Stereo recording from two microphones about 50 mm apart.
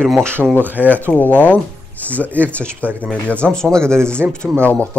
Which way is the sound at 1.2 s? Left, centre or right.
Left.